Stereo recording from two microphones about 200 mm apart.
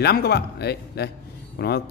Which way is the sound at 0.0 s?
55° left (ahead or behind).